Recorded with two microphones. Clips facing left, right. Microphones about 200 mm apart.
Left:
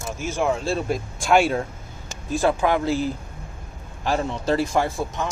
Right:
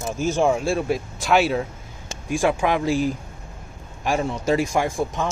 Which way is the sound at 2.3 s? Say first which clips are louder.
Even; 15° right (ahead or behind).